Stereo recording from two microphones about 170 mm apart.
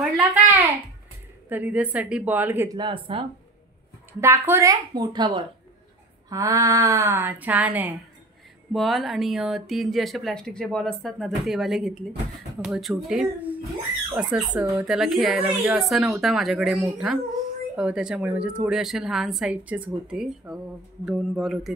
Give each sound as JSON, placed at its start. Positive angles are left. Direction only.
{"t": 0.0, "sound": "a sound", "side_deg": -10}
{"t": 1.5, "sound": "speech", "side_deg": -10}
{"t": 2.8, "sound": "speech", "side_deg": -30}
{"t": 4.2, "sound": "speech", "side_deg": -15}